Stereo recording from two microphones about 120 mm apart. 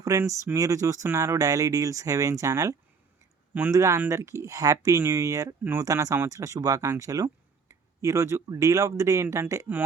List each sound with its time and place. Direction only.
0.0 s speech: 25° right (ahead or behind)